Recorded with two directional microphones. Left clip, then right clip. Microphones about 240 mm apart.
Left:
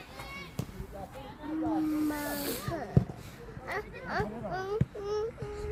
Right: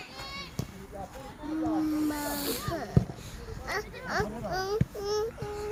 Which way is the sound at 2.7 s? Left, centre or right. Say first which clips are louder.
Left 1 dB; centre.